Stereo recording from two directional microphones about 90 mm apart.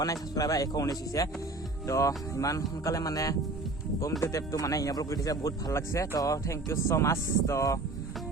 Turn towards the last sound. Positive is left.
turn(degrees=35)  # may be behind; listen again after turning